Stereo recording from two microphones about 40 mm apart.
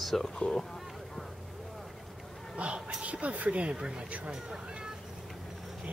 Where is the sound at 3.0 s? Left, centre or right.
Right.